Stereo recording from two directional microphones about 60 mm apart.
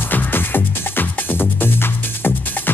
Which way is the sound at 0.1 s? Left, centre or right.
Left.